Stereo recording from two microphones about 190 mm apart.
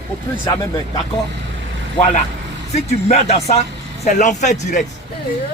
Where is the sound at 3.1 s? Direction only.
35° left (ahead or behind).